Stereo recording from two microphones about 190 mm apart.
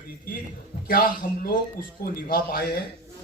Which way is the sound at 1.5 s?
50° left (ahead or behind).